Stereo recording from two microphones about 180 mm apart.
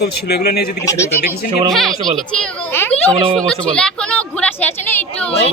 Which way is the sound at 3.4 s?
5° left (ahead or behind).